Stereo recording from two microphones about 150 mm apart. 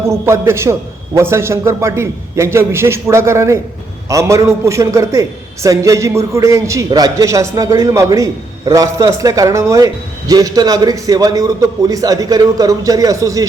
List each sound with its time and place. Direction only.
0.0 s a man's voice: 15° right (ahead or behind)